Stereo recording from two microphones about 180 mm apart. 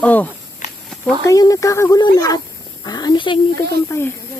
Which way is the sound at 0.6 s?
40° left (ahead or behind).